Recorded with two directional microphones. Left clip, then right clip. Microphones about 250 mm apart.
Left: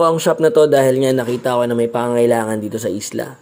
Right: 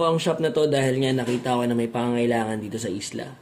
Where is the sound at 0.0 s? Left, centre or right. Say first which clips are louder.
Left 8 dB; left.